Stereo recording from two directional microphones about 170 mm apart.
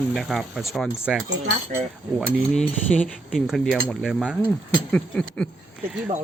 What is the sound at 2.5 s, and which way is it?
Speech, 5° left (ahead or behind).